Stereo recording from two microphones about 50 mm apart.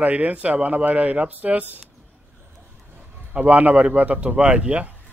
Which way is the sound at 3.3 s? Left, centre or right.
Right.